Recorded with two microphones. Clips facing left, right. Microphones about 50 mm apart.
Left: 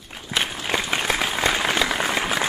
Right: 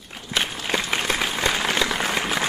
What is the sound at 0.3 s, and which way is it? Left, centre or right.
Applause, centre.